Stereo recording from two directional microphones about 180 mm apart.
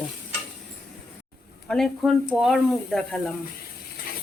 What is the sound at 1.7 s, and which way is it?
Speech, centre (ahead or behind).